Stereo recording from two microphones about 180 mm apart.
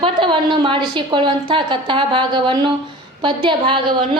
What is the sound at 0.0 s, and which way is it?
A woman's voice, 30° right (ahead or behind).